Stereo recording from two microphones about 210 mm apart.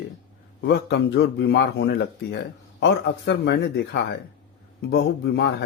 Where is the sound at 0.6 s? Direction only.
55° left (ahead or behind).